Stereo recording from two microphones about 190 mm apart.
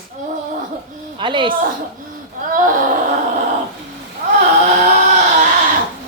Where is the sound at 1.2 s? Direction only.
25° right (ahead or behind).